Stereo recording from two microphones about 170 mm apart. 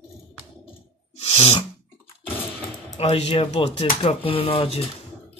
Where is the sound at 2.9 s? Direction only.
35° left (ahead or behind).